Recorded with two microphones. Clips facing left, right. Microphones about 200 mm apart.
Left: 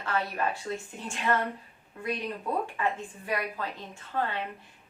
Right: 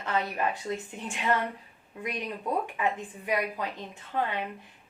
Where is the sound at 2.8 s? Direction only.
15° right (ahead or behind).